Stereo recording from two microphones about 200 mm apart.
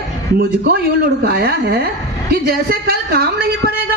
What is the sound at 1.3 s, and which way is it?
A woman's voice, 50° right (ahead or behind).